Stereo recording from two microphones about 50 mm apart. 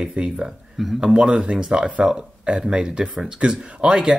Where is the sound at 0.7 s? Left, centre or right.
Centre.